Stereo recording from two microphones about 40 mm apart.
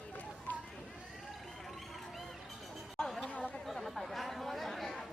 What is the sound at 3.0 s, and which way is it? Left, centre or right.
Chatter, centre.